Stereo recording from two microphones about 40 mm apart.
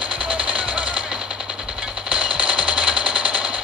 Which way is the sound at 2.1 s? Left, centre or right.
Right.